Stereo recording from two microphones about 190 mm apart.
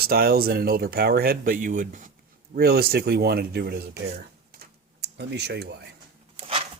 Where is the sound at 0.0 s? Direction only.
55° right (ahead or behind).